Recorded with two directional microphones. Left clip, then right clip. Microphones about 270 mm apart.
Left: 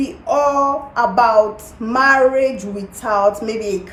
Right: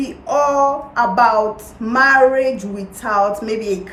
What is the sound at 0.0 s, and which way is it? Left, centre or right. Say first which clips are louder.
A woman's voice: left 1 dB; centre.